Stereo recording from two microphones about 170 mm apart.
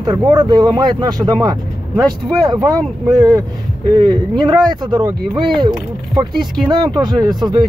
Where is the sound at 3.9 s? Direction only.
25° right (ahead or behind).